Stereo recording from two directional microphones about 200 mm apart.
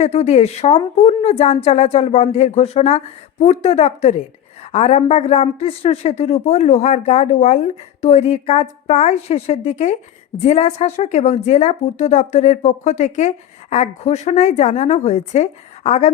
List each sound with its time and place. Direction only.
0.0 s speech: 35° left (ahead or behind)